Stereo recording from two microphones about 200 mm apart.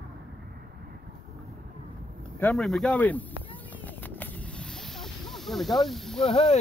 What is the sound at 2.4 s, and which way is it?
Speech, 5° left (ahead or behind).